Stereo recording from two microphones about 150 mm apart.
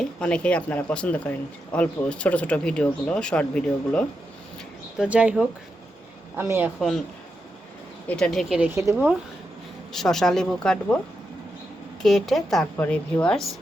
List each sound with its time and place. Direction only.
0.0 s speech: 5° left (ahead or behind)
4.9 s speech: 10° right (ahead or behind)
6.7 s speech: centre (ahead or behind)
8.0 s speech: 5° left (ahead or behind); by 9.0 s 20° right (ahead or behind)
9.9 s speech: centre (ahead or behind)
12.0 s speech: centre (ahead or behind)